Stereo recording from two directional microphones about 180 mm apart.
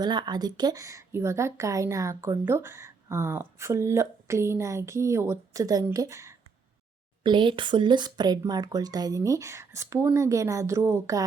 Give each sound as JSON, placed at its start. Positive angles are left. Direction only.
{"t": 0.0, "sound": "a woman's voice", "side_deg": -25}
{"t": 7.2, "sound": "speech", "side_deg": -25}